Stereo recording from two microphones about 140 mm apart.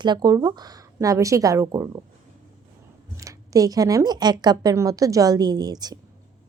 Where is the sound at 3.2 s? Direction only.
25° right (ahead or behind).